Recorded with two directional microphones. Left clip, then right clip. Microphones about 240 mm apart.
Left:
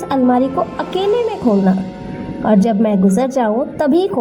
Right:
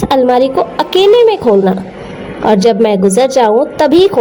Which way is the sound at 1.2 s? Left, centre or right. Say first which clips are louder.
Right 8 dB; right.